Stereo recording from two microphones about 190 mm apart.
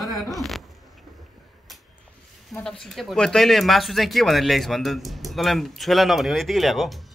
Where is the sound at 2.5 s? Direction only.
5° left (ahead or behind).